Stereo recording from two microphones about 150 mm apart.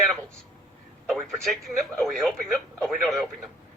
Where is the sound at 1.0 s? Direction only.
Centre (ahead or behind).